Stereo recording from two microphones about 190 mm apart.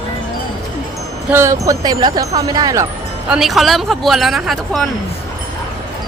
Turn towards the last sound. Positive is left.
turn(degrees=0)  # may be behind; listen again after turning